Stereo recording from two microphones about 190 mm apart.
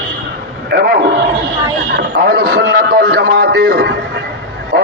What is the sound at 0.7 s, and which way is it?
A man's voice, 55° right (ahead or behind).